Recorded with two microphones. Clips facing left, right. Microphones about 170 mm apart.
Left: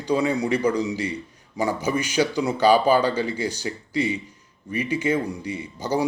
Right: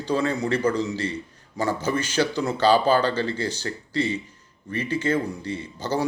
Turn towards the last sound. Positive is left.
turn(degrees=15)  # may be behind; listen again after turning